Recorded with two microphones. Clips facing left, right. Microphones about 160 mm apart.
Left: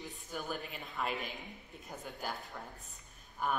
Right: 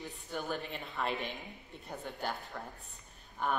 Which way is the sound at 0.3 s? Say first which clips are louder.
Right 3 dB; 5° left (ahead or behind).